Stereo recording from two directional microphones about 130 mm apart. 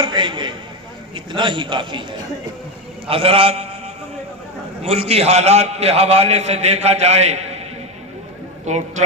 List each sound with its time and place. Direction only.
0.0 s a man's voice: 35° right (ahead or behind)
3.1 s a man's voice: 45° right (ahead or behind)
4.8 s a man's voice: 50° right (ahead or behind)
8.6 s a man's voice: 60° right (ahead or behind)